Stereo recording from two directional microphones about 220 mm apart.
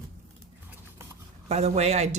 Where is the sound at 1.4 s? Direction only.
30° right (ahead or behind).